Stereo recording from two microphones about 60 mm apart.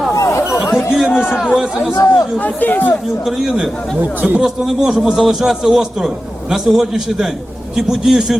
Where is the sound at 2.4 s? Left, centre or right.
Left.